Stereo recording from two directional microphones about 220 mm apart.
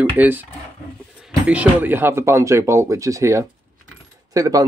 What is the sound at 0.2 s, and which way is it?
Speech, 10° right (ahead or behind).